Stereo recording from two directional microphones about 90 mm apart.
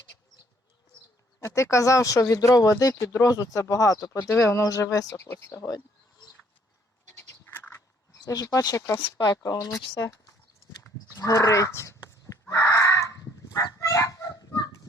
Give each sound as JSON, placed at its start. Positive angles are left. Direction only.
{"t": 1.4, "sound": "speech", "side_deg": 35}
{"t": 5.1, "sound": "speech", "side_deg": 30}
{"t": 7.1, "sound": "sheep", "side_deg": 25}
{"t": 8.2, "sound": "speech", "side_deg": 45}
{"t": 11.2, "sound": "a sound", "side_deg": 40}
{"t": 13.7, "sound": "fowl", "side_deg": 40}